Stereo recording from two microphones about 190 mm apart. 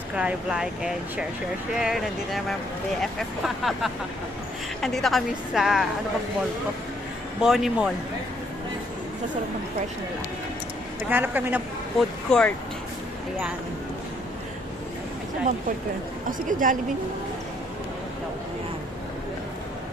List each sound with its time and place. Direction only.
0.2 s a woman's voice: 5° right (ahead or behind)
7.4 s a woman's voice: centre (ahead or behind)
11.1 s speech: 10° right (ahead or behind)
12.3 s a woman's voice: 5° left (ahead or behind)
16.5 s a woman's voice: 45° right (ahead or behind)